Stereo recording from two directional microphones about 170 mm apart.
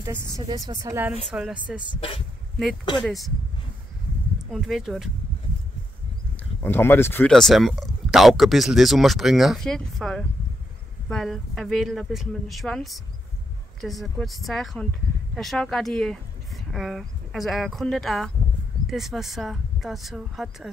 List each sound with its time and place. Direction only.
0.0 s a woman's voice: 15° right (ahead or behind)
2.0 s speech: 30° left (ahead or behind)
3.0 s speech: centre (ahead or behind)
4.4 s speech: centre (ahead or behind)
6.6 s speech: 15° left (ahead or behind)